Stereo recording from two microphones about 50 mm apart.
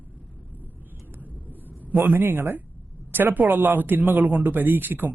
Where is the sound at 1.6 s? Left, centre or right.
Right.